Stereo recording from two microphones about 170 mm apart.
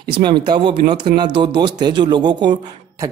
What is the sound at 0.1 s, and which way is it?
Speech, 25° right (ahead or behind).